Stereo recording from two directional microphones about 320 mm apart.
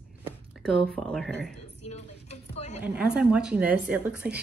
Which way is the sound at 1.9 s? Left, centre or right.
Centre.